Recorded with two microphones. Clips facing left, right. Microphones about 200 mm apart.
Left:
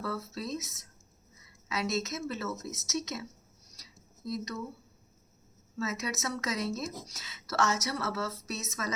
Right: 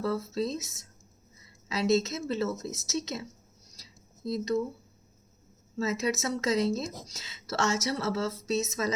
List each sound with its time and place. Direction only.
0.0 s speech: 30° right (ahead or behind)
4.3 s speech: 30° right (ahead or behind)
5.7 s speech: 30° right (ahead or behind)